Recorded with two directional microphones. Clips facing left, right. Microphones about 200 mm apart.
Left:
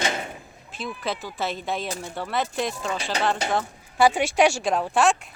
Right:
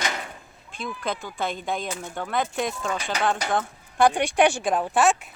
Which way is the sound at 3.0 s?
30° left (ahead or behind).